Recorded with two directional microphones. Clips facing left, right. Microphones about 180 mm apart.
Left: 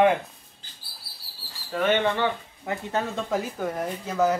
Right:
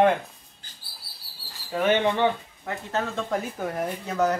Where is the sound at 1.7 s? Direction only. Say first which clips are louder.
Right 1 dB; 10° right (ahead or behind).